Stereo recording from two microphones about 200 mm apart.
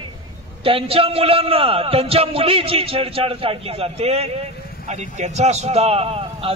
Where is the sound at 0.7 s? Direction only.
25° right (ahead or behind).